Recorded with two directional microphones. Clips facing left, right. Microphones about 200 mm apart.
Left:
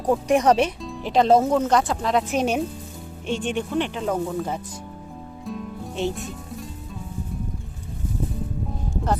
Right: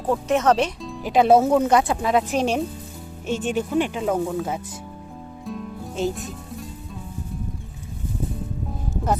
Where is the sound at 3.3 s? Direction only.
5° right (ahead or behind).